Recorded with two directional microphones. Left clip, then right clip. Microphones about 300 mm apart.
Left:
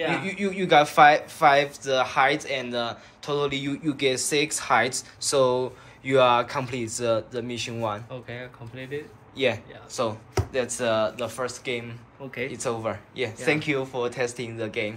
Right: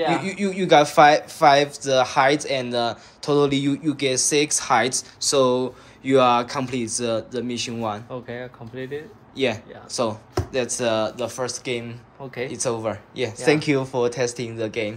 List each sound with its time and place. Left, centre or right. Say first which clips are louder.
0.1 s speech: right 3 dB; centre
8.1 s speech: right 5 dB; right
9.4 s speech: right 1 dB; centre